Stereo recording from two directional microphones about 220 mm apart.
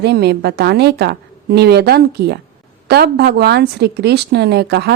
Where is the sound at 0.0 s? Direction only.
50° right (ahead or behind).